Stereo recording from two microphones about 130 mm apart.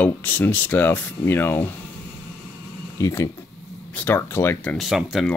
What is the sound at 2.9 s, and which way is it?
Speech, 20° left (ahead or behind).